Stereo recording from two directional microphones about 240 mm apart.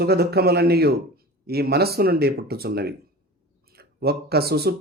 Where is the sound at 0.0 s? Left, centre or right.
Right.